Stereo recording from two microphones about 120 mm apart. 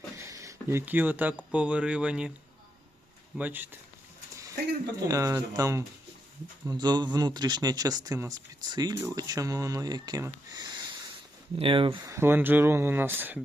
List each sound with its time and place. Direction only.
0.2 s a sound: 25° right (ahead or behind)
1.5 s speech: 10° right (ahead or behind)
3.3 s speech: 15° right (ahead or behind)
5.0 s speech: 25° right (ahead or behind)
6.7 s speech: 35° right (ahead or behind)
11.5 s speech: 45° right (ahead or behind)
12.0 s speech: 20° right (ahead or behind)